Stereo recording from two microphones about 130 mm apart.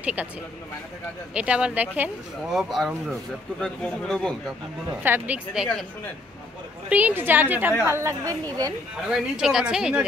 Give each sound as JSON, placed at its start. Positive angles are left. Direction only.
{"t": 0.0, "sound": "speech", "side_deg": -10}
{"t": 1.3, "sound": "a woman's voice", "side_deg": -10}
{"t": 2.5, "sound": "a woman's voice", "side_deg": 0}
{"t": 5.0, "sound": "a woman's voice", "side_deg": -15}
{"t": 6.9, "sound": "a woman's voice", "side_deg": -10}
{"t": 9.1, "sound": "a woman's voice", "side_deg": -5}